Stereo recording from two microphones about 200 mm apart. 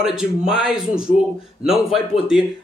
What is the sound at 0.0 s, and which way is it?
Speech, 5° right (ahead or behind).